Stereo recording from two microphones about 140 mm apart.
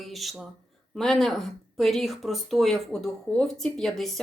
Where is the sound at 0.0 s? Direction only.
Centre (ahead or behind).